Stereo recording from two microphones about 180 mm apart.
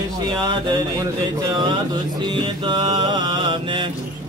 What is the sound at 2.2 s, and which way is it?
Mantra, 25° right (ahead or behind).